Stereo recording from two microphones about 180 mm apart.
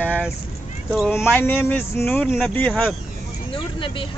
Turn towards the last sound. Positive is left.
turn(degrees=30)  # may be behind; listen again after turning